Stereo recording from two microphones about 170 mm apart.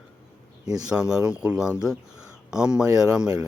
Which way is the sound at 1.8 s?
5° right (ahead or behind).